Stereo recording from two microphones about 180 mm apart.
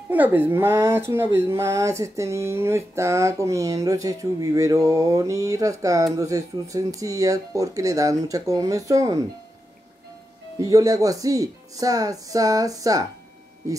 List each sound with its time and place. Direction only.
0.1 s speech: 10° right (ahead or behind)
10.6 s speech: 20° right (ahead or behind)